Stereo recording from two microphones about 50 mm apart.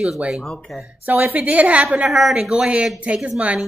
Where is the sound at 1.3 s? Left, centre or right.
Right.